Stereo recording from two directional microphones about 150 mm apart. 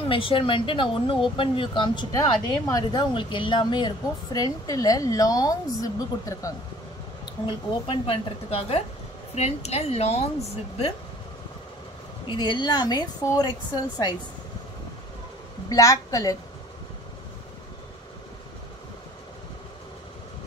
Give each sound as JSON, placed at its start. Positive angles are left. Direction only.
{"t": 0.1, "sound": "a woman's voice", "side_deg": 35}
{"t": 7.4, "sound": "a woman's voice", "side_deg": 35}
{"t": 12.3, "sound": "a woman's voice", "side_deg": 30}
{"t": 15.7, "sound": "a woman's voice", "side_deg": 20}